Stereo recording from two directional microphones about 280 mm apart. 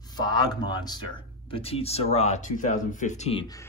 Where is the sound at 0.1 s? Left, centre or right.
Centre.